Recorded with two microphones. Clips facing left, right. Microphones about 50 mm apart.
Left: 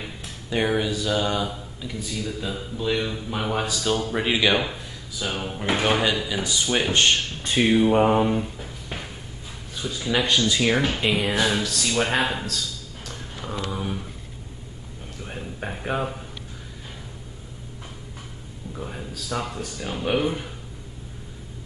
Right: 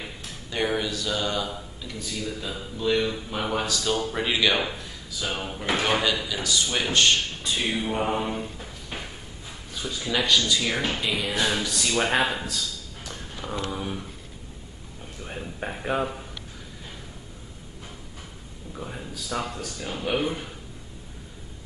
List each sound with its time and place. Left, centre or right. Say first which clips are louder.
0.0 s speech: left 1 dB; centre
6.2 s speech: left 2 dB; left
7.8 s speech: left 8 dB; left
8.2 s speech: left 7 dB; centre
9.8 s speech: left 3 dB; centre
10.2 s speech: left 1 dB; left
11.3 s speech: left 2 dB; centre
13.5 s speech: left 1 dB; centre
15.2 s speech: even; centre
18.8 s speech: left 1 dB; centre